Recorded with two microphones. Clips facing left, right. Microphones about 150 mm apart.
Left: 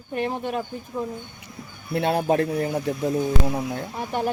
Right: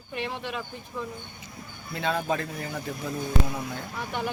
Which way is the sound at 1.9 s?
60° left (ahead or behind).